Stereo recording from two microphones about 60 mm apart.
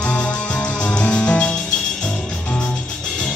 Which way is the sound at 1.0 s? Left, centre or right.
Centre.